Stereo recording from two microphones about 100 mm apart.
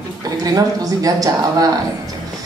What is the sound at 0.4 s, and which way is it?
A woman's voice, 35° right (ahead or behind).